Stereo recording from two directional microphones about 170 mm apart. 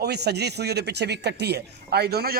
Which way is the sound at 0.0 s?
75° right (ahead or behind).